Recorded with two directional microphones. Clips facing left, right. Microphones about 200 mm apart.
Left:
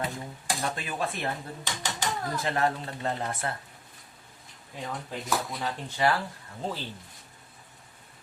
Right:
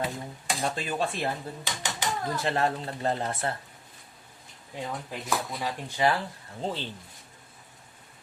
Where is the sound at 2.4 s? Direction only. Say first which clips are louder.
Even; 30° right (ahead or behind).